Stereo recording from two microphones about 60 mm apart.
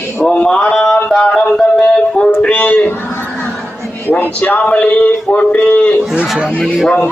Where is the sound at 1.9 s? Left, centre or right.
Centre.